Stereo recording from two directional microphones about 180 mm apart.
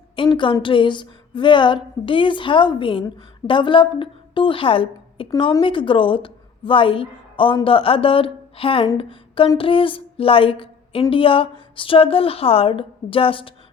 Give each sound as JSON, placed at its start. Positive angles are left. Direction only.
{"t": 0.2, "sound": "a woman's voice", "side_deg": 25}